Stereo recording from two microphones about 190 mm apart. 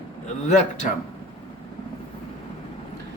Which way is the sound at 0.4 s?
40° left (ahead or behind).